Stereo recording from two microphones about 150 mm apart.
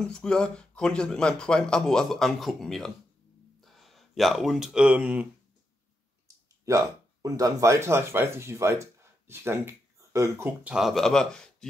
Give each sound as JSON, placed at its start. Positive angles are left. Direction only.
{"t": 0.0, "sound": "speech", "side_deg": 5}
{"t": 6.2, "sound": "speech", "side_deg": -20}
{"t": 10.7, "sound": "speech", "side_deg": 0}